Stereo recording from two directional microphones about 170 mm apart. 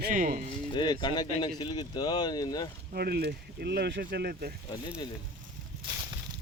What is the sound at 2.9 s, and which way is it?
Speech, 65° right (ahead or behind).